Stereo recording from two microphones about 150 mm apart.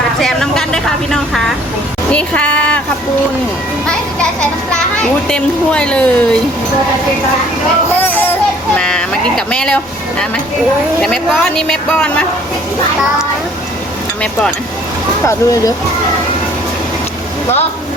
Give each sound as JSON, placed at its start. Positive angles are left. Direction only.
{"t": 0.2, "sound": "a sound", "side_deg": 5}
{"t": 2.0, "sound": "speech", "side_deg": 10}
{"t": 5.3, "sound": "speech", "side_deg": 5}
{"t": 8.0, "sound": "a sound", "side_deg": 10}
{"t": 8.7, "sound": "a woman's voice", "side_deg": 5}
{"t": 15.3, "sound": "speech", "side_deg": 20}